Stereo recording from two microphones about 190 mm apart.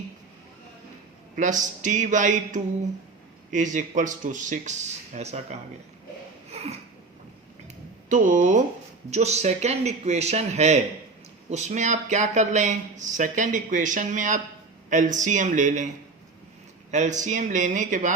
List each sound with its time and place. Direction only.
1.4 s speech: 40° right (ahead or behind)
6.5 s a sound: 35° right (ahead or behind)
8.1 s speech: 40° right (ahead or behind)
16.9 s speech: 40° right (ahead or behind)